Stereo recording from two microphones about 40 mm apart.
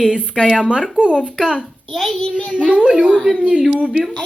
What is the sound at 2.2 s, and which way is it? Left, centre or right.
Speech, left.